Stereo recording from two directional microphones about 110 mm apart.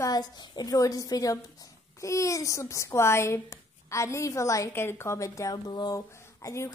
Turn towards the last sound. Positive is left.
turn(degrees=30)  # may be behind; listen again after turning